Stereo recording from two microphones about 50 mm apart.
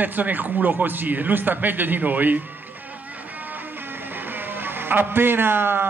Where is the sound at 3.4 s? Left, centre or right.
Right.